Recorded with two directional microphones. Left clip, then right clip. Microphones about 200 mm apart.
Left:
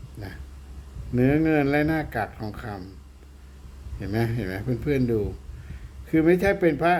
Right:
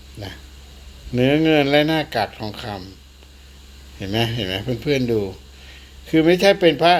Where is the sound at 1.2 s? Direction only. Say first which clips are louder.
Right 5 dB; 5° right (ahead or behind).